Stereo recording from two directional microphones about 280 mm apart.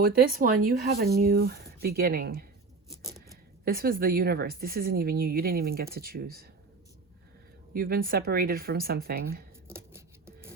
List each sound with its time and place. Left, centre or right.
0.0 s speech: right
3.6 s speech: right
7.7 s speech: right
9.6 s a sound: centre